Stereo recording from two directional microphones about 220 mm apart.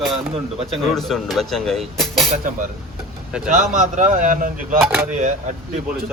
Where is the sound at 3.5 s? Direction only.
35° right (ahead or behind).